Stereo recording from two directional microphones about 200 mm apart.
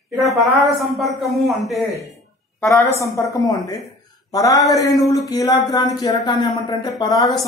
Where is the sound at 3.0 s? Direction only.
15° left (ahead or behind).